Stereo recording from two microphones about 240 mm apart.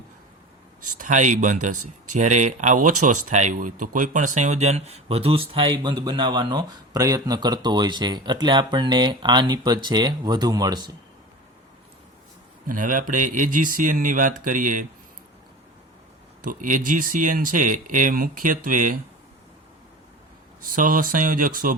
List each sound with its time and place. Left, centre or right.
0.9 s speech: right
1.7 s speech: right
2.1 s speech: right
12.6 s speech: right
16.4 s speech: right
20.7 s speech: right